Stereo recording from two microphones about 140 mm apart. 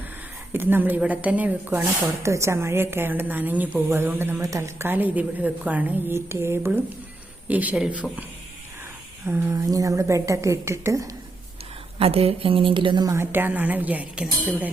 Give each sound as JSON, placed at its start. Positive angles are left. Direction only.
{"t": 0.5, "sound": "speech", "side_deg": -15}
{"t": 9.2, "sound": "a woman's voice", "side_deg": -15}
{"t": 11.9, "sound": "a woman's voice", "side_deg": -45}
{"t": 13.1, "sound": "speech", "side_deg": -15}